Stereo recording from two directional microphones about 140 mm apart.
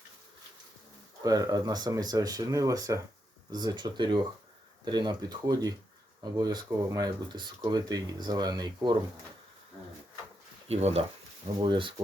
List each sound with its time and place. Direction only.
1.2 s speech: 25° right (ahead or behind)
10.7 s speech: 50° right (ahead or behind)
11.6 s speech: 35° right (ahead or behind)